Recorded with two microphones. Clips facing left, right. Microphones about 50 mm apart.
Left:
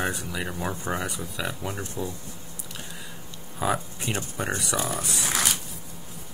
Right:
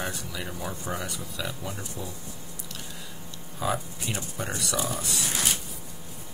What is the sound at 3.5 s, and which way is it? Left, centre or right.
Speech, left.